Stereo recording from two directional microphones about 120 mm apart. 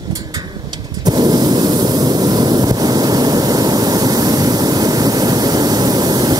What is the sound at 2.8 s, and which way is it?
Waves, 35° right (ahead or behind).